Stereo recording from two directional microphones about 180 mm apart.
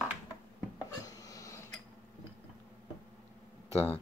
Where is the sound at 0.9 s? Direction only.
20° left (ahead or behind).